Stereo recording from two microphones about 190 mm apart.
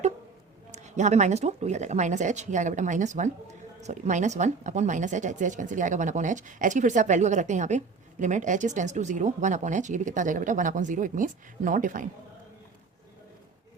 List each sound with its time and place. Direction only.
0.7 s speech: 40° right (ahead or behind)